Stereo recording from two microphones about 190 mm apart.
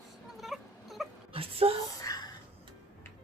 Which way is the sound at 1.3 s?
30° right (ahead or behind).